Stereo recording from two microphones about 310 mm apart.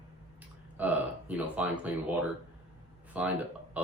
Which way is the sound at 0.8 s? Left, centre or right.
Centre.